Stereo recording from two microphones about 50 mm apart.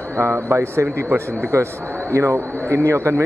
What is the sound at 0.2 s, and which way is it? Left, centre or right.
A man's voice, right.